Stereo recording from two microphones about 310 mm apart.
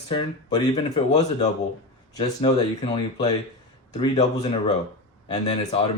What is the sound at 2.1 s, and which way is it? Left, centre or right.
Speech, centre.